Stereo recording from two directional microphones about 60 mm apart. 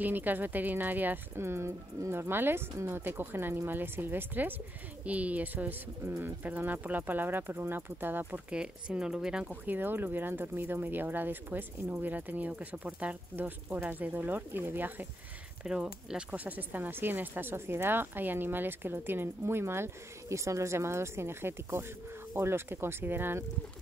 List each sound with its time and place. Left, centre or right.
0.0 s speech: right
8.5 s speech: centre
9.5 s speech: right
15.6 s speech: centre; by 23.4 s right